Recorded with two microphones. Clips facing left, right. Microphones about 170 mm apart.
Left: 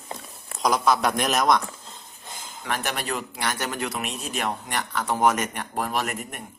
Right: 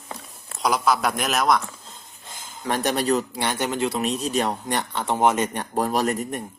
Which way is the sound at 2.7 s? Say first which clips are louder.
Right 7 dB; 35° right (ahead or behind).